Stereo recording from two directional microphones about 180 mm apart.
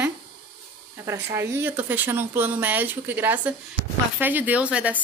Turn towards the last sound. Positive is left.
turn(degrees=-5)  # may be behind; listen again after turning